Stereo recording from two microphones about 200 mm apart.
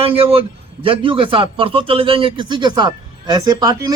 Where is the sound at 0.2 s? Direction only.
30° right (ahead or behind).